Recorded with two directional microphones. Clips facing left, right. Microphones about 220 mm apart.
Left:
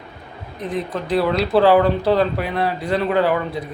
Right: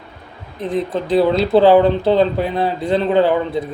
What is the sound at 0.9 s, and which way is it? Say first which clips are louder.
A man's voice: right 4 dB; 25° right (ahead or behind).